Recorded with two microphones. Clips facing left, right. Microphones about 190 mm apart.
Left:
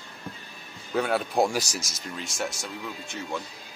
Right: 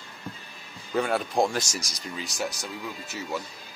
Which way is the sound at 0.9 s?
Centre (ahead or behind).